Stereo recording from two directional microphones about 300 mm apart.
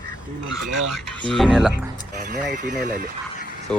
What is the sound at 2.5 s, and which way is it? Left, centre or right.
Speech, right.